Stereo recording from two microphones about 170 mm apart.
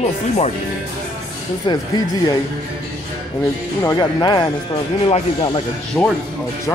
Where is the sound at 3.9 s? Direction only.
25° left (ahead or behind).